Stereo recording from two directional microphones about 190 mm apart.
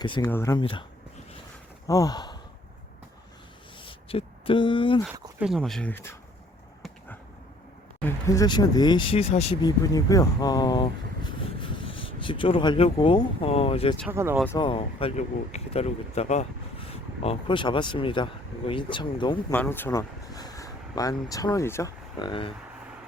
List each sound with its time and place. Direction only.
0.0 s speech: 25° left (ahead or behind)
0.6 s speech: 25° left (ahead or behind)
1.9 s speech: 20° left (ahead or behind)
3.8 s speech: 25° left (ahead or behind)
5.4 s speech: centre (ahead or behind)
8.0 s speech: 15° left (ahead or behind)
14.1 s speech: 15° right (ahead or behind)
14.6 s speech: 30° left (ahead or behind)
19.5 s speech: 10° left (ahead or behind); by 22.5 s 25° left (ahead or behind)